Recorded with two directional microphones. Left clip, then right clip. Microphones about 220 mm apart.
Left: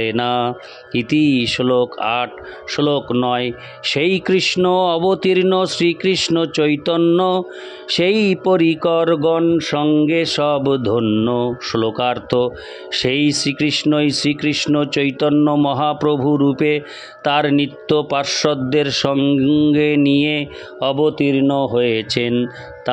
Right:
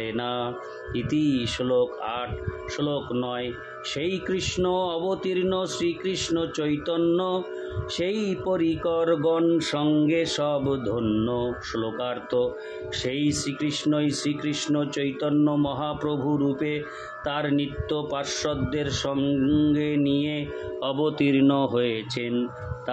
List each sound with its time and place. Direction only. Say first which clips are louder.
0.0 s speech: left 11 dB; 40° left (ahead or behind)
20.9 s speech: left 7 dB; 25° left (ahead or behind)
21.9 s speech: left 10 dB; 40° left (ahead or behind)